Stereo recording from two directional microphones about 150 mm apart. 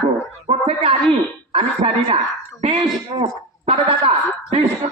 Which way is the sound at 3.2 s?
40° right (ahead or behind).